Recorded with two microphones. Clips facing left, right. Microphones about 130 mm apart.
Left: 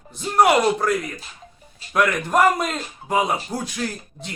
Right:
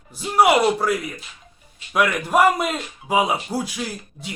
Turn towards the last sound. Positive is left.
turn(degrees=-10)  # may be behind; listen again after turning